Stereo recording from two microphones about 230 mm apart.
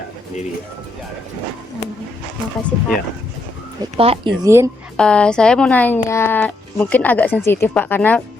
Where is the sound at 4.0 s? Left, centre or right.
Right.